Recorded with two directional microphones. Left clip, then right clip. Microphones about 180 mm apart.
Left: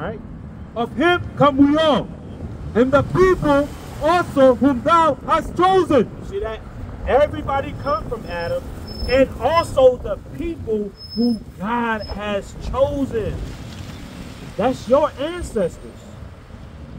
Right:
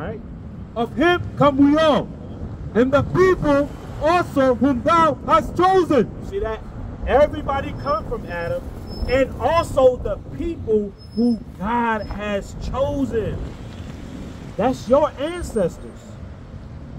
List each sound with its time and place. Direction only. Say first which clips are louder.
0.7 s a man's voice: left 1 dB; 15° right (ahead or behind)
11.6 s a man's voice: right 1 dB; 25° right (ahead or behind)
14.6 s a man's voice: left 1 dB; 25° right (ahead or behind)